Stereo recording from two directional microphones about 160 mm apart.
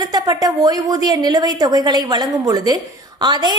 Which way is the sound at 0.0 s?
25° right (ahead or behind).